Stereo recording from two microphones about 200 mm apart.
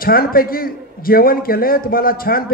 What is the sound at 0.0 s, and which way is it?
A man's voice, 45° left (ahead or behind).